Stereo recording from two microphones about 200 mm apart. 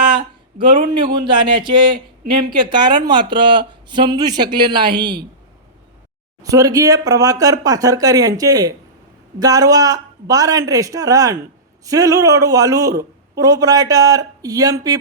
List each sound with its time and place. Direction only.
0.6 s a man's voice: 25° right (ahead or behind)
6.4 s a man's voice: 15° right (ahead or behind)